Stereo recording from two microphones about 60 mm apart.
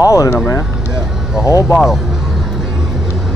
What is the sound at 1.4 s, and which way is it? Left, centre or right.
Speech, left.